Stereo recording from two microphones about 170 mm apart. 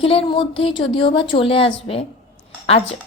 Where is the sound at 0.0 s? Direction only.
30° left (ahead or behind).